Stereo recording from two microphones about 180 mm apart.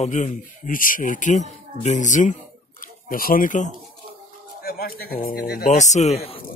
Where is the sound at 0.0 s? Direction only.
40° left (ahead or behind).